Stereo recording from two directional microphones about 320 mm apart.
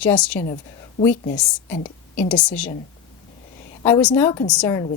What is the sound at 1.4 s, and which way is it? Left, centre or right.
A woman's voice, centre.